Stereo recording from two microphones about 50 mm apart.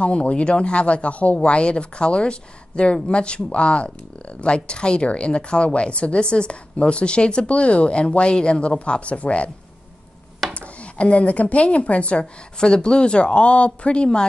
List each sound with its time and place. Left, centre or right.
0.0 s speech: left
10.5 s speech: left